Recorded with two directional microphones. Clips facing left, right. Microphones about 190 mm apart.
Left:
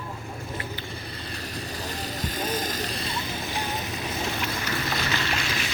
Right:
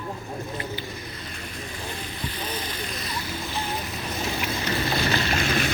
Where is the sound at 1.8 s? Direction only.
40° left (ahead or behind).